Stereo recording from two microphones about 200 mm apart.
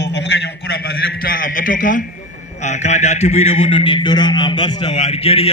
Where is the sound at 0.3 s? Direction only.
55° left (ahead or behind).